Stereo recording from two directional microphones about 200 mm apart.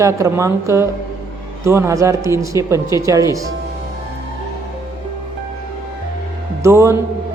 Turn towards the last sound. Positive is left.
turn(degrees=-15)  # may be behind; listen again after turning